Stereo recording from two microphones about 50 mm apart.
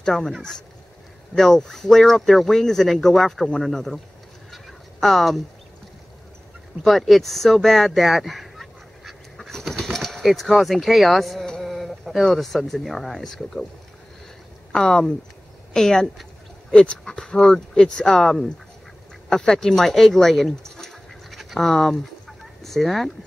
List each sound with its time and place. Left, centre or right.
0.0 s speech: centre
1.3 s speech: centre
4.5 s a sound: centre
6.8 s speech: centre
11.4 s a sound: centre
11.7 s speech: centre
14.7 s speech: centre
21.4 s chicken: centre